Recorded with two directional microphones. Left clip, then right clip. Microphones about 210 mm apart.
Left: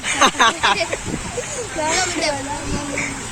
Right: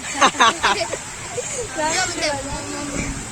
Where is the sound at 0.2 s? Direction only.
Centre (ahead or behind).